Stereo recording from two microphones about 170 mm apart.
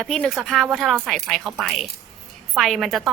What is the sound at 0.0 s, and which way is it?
A woman's voice, 5° left (ahead or behind).